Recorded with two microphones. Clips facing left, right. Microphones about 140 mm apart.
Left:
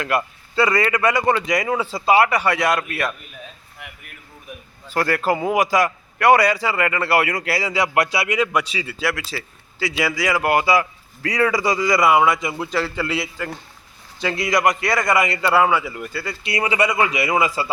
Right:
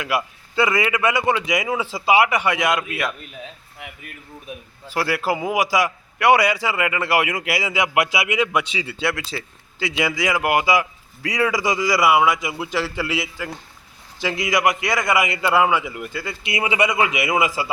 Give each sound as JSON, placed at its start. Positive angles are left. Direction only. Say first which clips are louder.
{"t": 0.0, "sound": "a man's voice", "louder": "left 2 dB", "side_deg": -10}
{"t": 4.9, "sound": "a man's voice", "louder": "left 2 dB", "side_deg": -10}
{"t": 8.7, "sound": "a man's voice", "louder": "even", "side_deg": -25}